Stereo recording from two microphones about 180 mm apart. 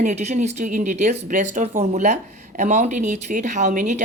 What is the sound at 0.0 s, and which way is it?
Speech, 40° right (ahead or behind).